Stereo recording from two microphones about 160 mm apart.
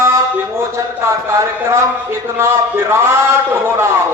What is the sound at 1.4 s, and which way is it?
A man's voice, 15° right (ahead or behind).